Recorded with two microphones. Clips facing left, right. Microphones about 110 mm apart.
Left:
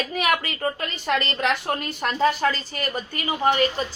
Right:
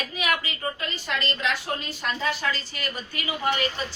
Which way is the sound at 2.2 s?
45° left (ahead or behind).